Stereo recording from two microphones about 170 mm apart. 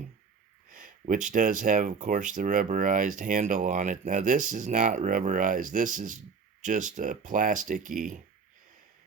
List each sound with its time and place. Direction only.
0.7 s speech: 50° right (ahead or behind)